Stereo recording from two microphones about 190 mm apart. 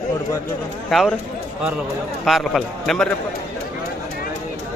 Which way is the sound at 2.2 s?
Centre (ahead or behind).